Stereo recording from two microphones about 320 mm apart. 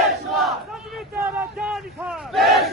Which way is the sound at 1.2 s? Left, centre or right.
Centre.